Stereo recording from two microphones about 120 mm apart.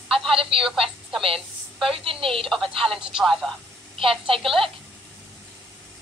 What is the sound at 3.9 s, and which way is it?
Speech, 50° right (ahead or behind).